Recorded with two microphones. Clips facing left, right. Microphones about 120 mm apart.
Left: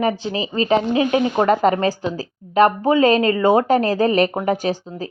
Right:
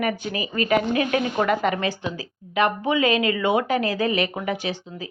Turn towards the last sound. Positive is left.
turn(degrees=40)  # may be behind; listen again after turning